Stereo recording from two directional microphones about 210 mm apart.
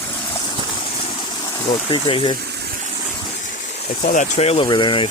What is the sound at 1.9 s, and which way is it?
Speech, 25° left (ahead or behind).